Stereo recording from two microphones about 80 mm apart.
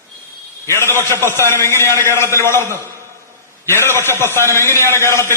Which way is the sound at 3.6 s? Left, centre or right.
Left.